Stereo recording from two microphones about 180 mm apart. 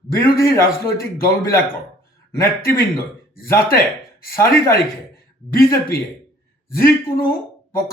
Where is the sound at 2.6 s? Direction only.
55° left (ahead or behind).